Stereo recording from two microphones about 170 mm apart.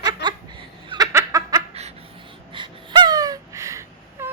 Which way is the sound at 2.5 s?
25° right (ahead or behind).